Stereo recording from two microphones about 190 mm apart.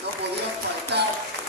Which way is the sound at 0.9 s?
60° right (ahead or behind).